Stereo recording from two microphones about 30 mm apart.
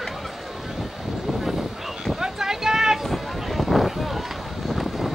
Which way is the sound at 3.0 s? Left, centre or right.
Centre.